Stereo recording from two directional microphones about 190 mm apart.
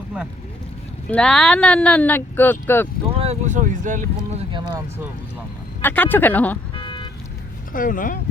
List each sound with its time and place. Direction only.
1.1 s speech: 5° left (ahead or behind)
3.1 s speech: 30° right (ahead or behind)
4.4 s speech: 25° right (ahead or behind)
5.8 s speech: 10° left (ahead or behind)
6.7 s car alarm: 25° left (ahead or behind)
7.7 s speech: 45° left (ahead or behind)